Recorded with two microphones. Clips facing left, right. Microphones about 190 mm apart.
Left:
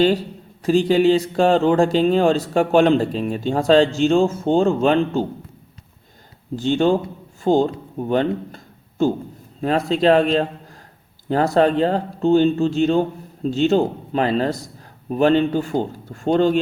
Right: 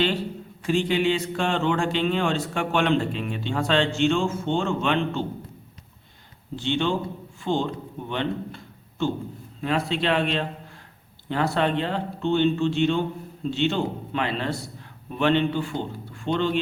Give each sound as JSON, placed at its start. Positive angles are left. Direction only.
{"t": 0.6, "sound": "speech", "side_deg": 40}
{"t": 6.6, "sound": "a man's voice", "side_deg": 40}